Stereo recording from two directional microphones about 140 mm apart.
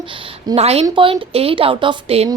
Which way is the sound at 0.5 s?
45° right (ahead or behind).